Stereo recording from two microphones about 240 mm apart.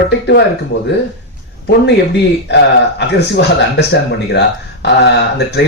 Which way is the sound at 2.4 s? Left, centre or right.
Left.